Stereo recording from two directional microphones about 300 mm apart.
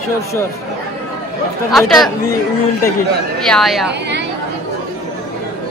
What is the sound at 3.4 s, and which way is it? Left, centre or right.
Speech, centre.